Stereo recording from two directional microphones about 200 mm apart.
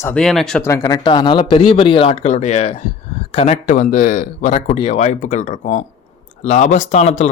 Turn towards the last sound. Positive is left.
turn(degrees=35)  # may be behind; listen again after turning